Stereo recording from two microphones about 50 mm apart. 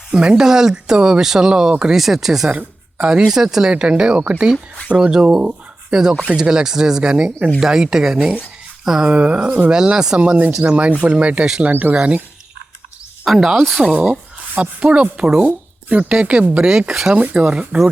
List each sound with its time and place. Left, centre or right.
0.1 s speech: centre
2.5 s a sound: right
3.1 s speech: centre
7.3 s speech: right
7.6 s speech: centre
8.8 s a sound: centre
9.0 s speech: right
11.7 s speech: right
11.9 s speech: right
13.2 s speech: centre
14.6 s speech: right
16.9 s speech: centre
17.2 s speech: right